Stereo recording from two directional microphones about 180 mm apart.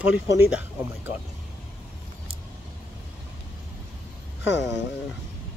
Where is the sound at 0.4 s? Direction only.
10° right (ahead or behind).